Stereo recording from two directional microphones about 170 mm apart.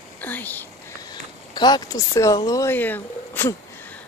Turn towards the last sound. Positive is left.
turn(degrees=10)  # may be behind; listen again after turning